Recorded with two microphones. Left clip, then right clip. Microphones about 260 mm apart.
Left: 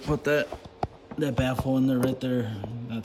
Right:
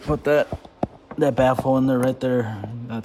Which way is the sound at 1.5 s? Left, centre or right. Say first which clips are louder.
Right 8 dB; right.